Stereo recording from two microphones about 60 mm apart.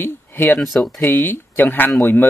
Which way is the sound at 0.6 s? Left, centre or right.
Centre.